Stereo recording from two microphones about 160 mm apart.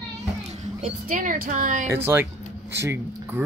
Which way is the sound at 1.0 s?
60° right (ahead or behind).